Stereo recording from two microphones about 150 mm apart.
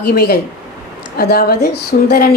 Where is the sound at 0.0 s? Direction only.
90° left.